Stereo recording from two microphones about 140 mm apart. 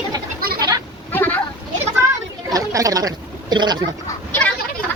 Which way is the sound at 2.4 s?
25° right (ahead or behind).